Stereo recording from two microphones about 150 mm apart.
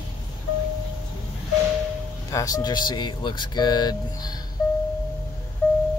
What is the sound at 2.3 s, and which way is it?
Speech, 25° left (ahead or behind).